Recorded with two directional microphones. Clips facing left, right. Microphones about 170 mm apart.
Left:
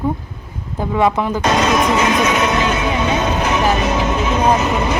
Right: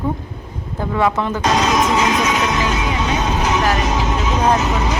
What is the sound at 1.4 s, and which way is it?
Music, 55° left (ahead or behind).